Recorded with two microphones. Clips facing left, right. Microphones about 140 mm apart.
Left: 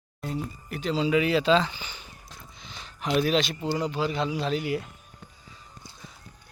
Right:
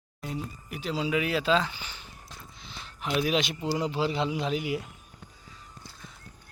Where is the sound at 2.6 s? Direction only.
Centre (ahead or behind).